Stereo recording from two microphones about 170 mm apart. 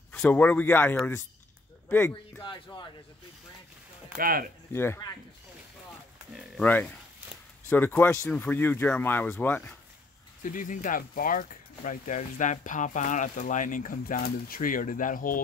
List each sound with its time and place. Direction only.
0.1 s speech: 10° left (ahead or behind)
2.4 s speech: 25° left (ahead or behind)
4.2 s speech: 60° right (ahead or behind)
4.7 s speech: 15° left (ahead or behind)
6.6 s speech: 10° left (ahead or behind)
10.4 s speech: 50° left (ahead or behind)